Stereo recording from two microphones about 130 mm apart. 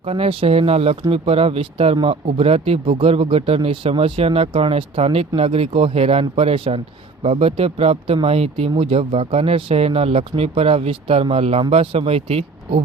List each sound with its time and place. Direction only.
0.0 s speech: 45° right (ahead or behind)